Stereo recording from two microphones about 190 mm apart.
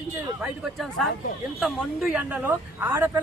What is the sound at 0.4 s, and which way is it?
A man's voice, centre (ahead or behind).